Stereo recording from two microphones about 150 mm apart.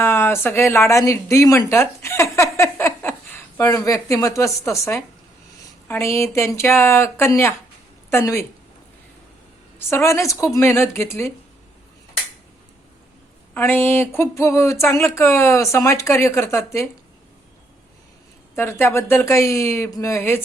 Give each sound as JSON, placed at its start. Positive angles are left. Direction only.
{"t": 0.0, "sound": "speech", "side_deg": 15}
{"t": 9.7, "sound": "speech", "side_deg": 20}
{"t": 13.5, "sound": "speech", "side_deg": 15}
{"t": 18.5, "sound": "speech", "side_deg": 15}